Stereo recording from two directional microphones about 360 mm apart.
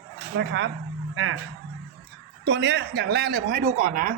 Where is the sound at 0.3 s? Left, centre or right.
Right.